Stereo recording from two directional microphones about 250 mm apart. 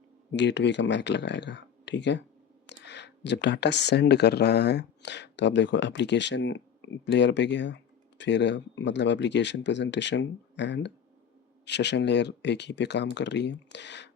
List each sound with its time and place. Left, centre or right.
0.3 s speech: left